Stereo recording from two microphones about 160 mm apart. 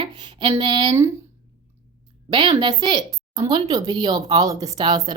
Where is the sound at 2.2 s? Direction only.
30° right (ahead or behind).